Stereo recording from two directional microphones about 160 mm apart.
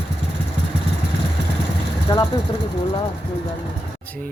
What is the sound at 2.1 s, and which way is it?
Speech, 25° left (ahead or behind).